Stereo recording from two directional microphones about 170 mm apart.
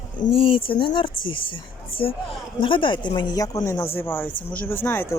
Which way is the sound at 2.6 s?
30° left (ahead or behind).